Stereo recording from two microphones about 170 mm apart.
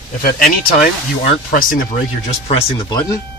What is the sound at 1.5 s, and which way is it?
Speech, 55° left (ahead or behind).